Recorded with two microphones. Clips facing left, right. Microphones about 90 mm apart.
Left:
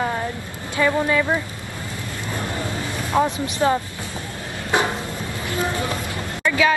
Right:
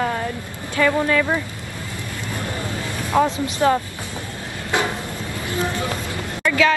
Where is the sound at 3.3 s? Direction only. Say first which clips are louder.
Right 2 dB; 15° left (ahead or behind).